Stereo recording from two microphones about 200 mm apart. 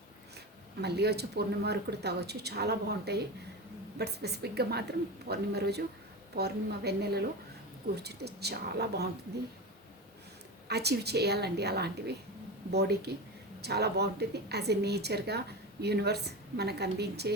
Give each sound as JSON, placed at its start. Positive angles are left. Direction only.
{"t": 0.8, "sound": "a woman's voice", "side_deg": -55}
{"t": 10.7, "sound": "speech", "side_deg": -55}